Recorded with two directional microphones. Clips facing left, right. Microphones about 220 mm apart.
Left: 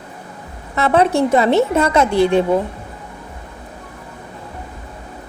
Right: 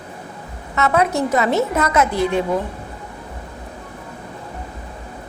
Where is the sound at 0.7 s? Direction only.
30° left (ahead or behind).